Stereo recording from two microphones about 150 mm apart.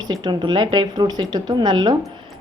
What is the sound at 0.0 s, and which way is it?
A woman's voice, 30° right (ahead or behind).